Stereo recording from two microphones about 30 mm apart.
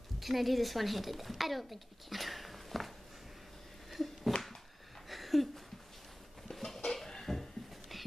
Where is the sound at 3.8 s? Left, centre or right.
Centre.